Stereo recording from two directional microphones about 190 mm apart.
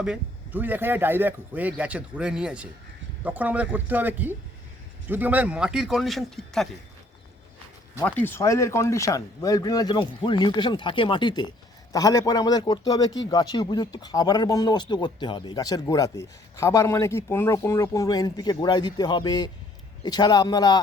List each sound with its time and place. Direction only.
0.0 s speech: 5° right (ahead or behind)
8.0 s speech: 10° left (ahead or behind)